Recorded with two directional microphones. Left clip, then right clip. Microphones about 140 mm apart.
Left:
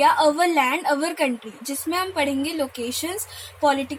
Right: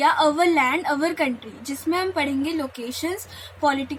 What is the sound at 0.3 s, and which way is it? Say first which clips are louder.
A woman's voice: even; 70° left (ahead or behind).